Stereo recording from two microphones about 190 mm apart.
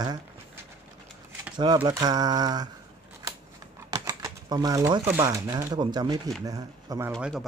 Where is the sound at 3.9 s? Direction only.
15° right (ahead or behind).